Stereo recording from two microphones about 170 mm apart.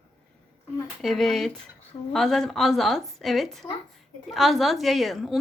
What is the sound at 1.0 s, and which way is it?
Speech, centre (ahead or behind).